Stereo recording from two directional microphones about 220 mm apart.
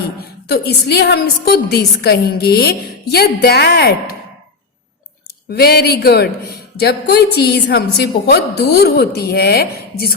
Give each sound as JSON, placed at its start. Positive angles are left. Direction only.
{"t": 0.4, "sound": "a woman's voice", "side_deg": 45}
{"t": 5.5, "sound": "a woman's voice", "side_deg": 45}